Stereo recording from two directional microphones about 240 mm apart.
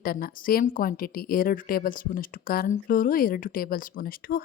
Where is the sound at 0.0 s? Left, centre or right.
Left.